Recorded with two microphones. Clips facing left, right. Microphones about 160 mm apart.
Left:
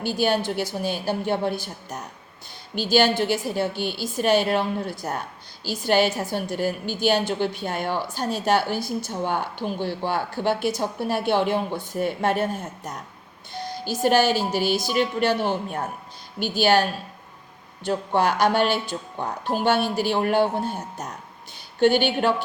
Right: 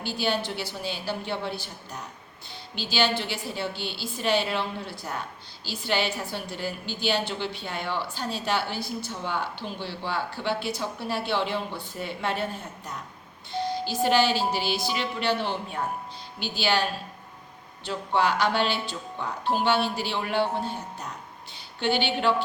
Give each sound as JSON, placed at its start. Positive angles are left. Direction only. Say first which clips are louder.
{"t": 0.0, "sound": "a woman's voice", "louder": "left 5 dB", "side_deg": 45}